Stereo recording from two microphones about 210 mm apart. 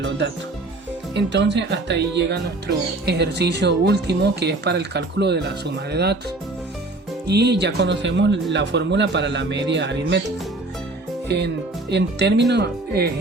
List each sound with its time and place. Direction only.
1.1 s speech: 55° right (ahead or behind)
7.3 s a man's voice: 50° right (ahead or behind)
11.3 s speech: 55° right (ahead or behind)